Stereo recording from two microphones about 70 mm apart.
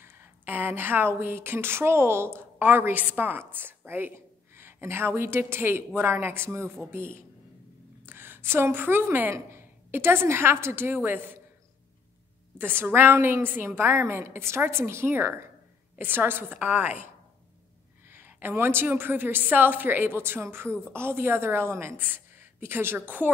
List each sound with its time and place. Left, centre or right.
0.0 s a woman's voice: right
12.5 s a woman's voice: right
18.0 s a woman's voice: right